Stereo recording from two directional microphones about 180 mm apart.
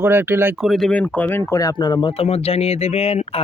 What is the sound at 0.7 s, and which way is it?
Speech, centre (ahead or behind).